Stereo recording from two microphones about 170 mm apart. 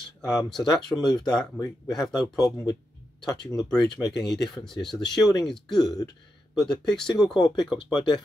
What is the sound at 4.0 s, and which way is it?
Speech, centre (ahead or behind).